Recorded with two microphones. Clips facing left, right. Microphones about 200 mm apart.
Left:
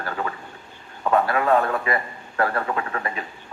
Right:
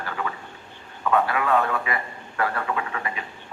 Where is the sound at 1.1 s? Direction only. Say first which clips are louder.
Left 2 dB; 40° left (ahead or behind).